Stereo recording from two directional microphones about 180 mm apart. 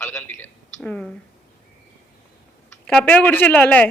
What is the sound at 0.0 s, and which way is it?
A woman's voice, 10° left (ahead or behind).